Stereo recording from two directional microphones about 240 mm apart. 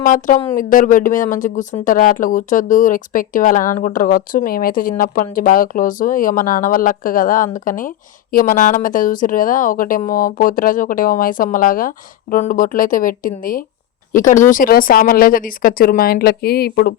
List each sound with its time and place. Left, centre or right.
0.0 s speech: left